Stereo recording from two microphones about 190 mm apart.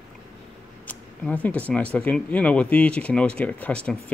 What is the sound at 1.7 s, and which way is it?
Speech, 5° left (ahead or behind).